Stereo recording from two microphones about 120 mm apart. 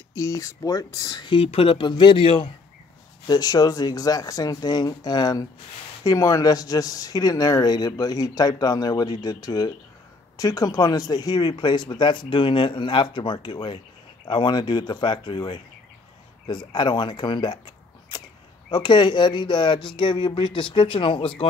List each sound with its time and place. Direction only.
0.1 s speech: 30° left (ahead or behind)
1.3 s speech: 50° left (ahead or behind)
3.3 s speech: 35° left (ahead or behind)
18.7 s speech: 40° left (ahead or behind)